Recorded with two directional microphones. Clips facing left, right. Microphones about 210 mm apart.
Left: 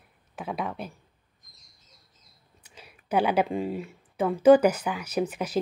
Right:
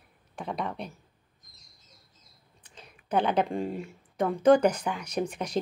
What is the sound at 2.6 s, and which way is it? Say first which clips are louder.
Speech: left 1 dB; 10° left (ahead or behind).